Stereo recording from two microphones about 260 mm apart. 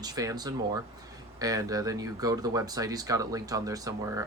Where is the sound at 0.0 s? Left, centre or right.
Centre.